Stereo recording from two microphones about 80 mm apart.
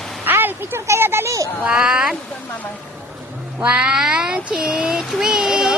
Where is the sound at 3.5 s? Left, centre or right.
Centre.